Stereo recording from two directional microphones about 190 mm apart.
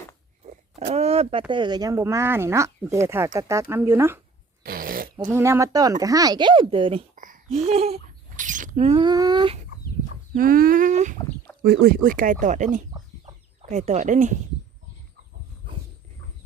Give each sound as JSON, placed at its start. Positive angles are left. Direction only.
{"t": 0.9, "sound": "speech", "side_deg": -30}
{"t": 4.6, "sound": "fart", "side_deg": -50}
{"t": 5.3, "sound": "speech", "side_deg": -15}
{"t": 7.2, "sound": "a sound", "side_deg": -40}
{"t": 10.3, "sound": "speech", "side_deg": -50}
{"t": 11.6, "sound": "speech", "side_deg": -55}
{"t": 12.9, "sound": "chicken", "side_deg": -25}
{"t": 13.7, "sound": "speech", "side_deg": -35}